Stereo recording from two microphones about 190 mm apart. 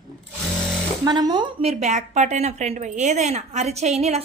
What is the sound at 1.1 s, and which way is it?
Speech, 20° right (ahead or behind).